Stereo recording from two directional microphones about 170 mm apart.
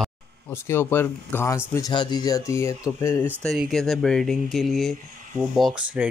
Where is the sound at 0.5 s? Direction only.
15° left (ahead or behind).